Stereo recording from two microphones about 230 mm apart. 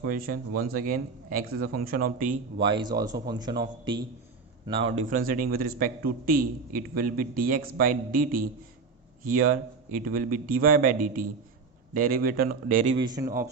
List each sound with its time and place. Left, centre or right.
0.0 s a man's voice: right
2.6 s speech: right
4.9 s a man's voice: right
13.0 s speech: centre